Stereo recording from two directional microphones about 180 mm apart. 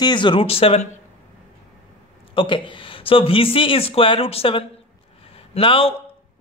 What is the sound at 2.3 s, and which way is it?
A man's voice, 30° left (ahead or behind).